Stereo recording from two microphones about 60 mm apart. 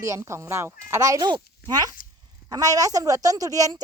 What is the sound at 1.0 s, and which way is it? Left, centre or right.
A woman's voice, right.